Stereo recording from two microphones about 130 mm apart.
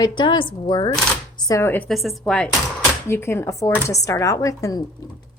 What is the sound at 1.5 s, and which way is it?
Speech, 20° left (ahead or behind).